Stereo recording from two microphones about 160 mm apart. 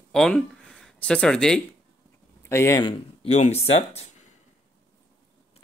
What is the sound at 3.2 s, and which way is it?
Speech, 45° left (ahead or behind).